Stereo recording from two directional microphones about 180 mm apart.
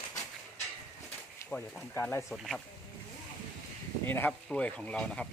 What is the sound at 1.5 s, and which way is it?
Speech, 5° left (ahead or behind).